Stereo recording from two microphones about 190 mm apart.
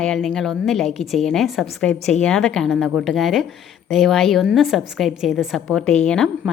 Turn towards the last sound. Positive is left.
turn(degrees=5)  # may be behind; listen again after turning